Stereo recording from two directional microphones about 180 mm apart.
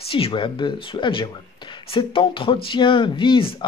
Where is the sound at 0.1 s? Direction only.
30° left (ahead or behind).